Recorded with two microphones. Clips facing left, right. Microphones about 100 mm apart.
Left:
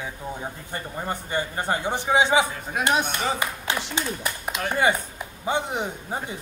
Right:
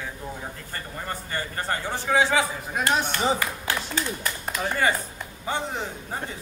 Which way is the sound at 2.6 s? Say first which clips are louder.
Left 1 dB; centre (ahead or behind).